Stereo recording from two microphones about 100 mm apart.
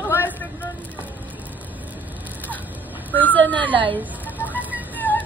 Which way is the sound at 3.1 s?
15° left (ahead or behind).